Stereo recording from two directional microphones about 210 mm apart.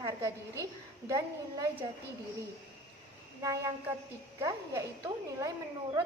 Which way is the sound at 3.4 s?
15° right (ahead or behind).